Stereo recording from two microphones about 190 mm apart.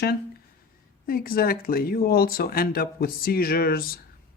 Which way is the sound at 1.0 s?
50° left (ahead or behind).